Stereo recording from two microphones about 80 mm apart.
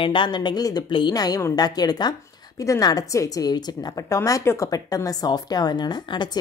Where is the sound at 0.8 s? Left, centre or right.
Left.